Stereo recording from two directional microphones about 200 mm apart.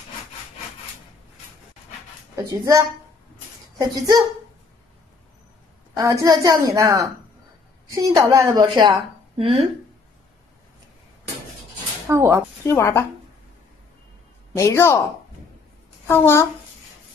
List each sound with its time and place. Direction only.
2.3 s speech: 15° right (ahead or behind)
6.2 s a woman's voice: 20° right (ahead or behind)
12.1 s speech: 15° right (ahead or behind)
12.6 s speech: 10° left (ahead or behind)
14.5 s speech: 15° left (ahead or behind)
16.1 s speech: 15° left (ahead or behind)